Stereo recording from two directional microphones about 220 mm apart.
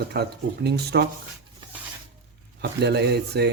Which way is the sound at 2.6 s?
50° right (ahead or behind).